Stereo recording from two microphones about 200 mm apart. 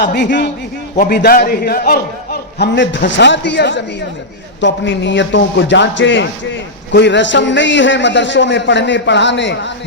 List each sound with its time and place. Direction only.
0.0 s a man's voice: 60° left (ahead or behind)